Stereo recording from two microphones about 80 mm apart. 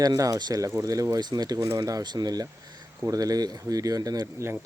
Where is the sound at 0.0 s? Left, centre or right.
Right.